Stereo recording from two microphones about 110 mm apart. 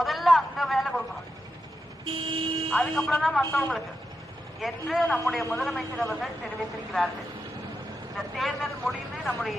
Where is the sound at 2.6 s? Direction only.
10° left (ahead or behind).